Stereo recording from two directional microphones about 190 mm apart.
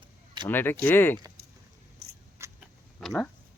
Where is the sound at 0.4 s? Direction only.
10° left (ahead or behind).